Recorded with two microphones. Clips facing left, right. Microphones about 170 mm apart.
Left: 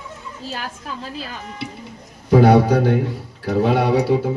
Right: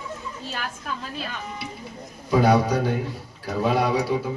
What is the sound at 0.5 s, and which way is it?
Speech, 30° left (ahead or behind).